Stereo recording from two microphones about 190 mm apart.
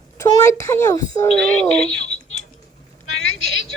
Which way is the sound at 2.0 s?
90° left.